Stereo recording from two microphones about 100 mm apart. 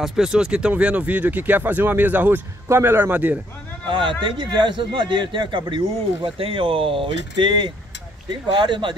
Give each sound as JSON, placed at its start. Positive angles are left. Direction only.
{"t": 0.0, "sound": "speech", "side_deg": -5}
{"t": 3.8, "sound": "a man's voice", "side_deg": -55}